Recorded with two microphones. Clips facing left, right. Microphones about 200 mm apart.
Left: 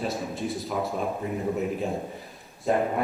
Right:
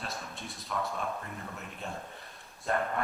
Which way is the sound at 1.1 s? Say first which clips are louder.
Left 11 dB; 15° left (ahead or behind).